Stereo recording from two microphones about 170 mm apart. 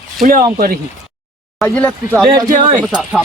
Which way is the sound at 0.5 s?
60° right (ahead or behind).